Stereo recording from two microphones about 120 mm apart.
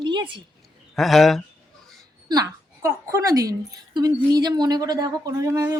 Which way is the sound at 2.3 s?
30° right (ahead or behind).